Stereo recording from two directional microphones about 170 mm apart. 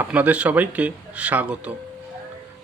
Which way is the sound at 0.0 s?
10° right (ahead or behind).